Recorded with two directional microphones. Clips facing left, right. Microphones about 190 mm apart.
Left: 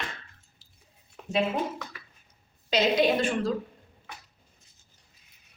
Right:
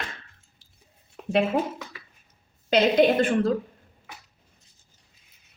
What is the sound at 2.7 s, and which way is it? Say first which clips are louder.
Speech: right 4 dB; 55° right (ahead or behind).